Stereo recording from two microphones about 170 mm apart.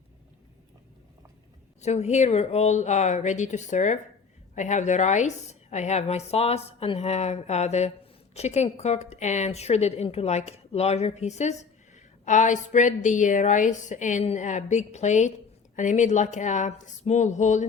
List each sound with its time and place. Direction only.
1.8 s a woman's voice: 40° left (ahead or behind)